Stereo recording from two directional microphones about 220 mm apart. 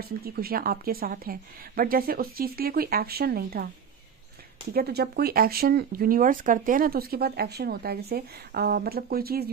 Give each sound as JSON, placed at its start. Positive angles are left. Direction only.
{"t": 0.0, "sound": "speech", "side_deg": -45}
{"t": 4.7, "sound": "speech", "side_deg": -45}